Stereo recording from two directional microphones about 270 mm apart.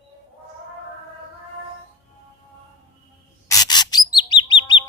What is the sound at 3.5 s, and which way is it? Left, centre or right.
Bird, centre.